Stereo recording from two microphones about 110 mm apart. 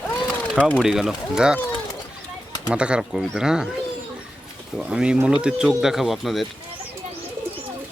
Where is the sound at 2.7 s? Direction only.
10° right (ahead or behind).